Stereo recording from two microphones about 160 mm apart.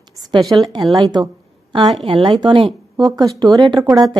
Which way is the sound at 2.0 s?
35° right (ahead or behind).